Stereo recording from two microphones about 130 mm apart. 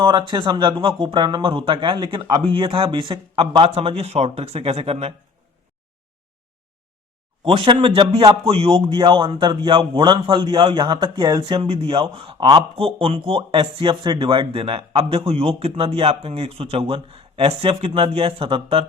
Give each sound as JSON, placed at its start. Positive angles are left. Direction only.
{"t": 0.0, "sound": "a man's voice", "side_deg": -40}
{"t": 7.4, "sound": "a man's voice", "side_deg": -40}